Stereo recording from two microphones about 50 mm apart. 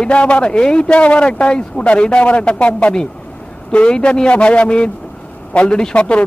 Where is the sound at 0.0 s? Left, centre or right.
Left.